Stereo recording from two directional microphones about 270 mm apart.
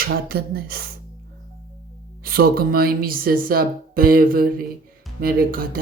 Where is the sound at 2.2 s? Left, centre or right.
Right.